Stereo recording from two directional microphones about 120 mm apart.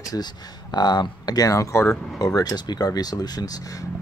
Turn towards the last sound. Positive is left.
turn(degrees=30)  # may be behind; listen again after turning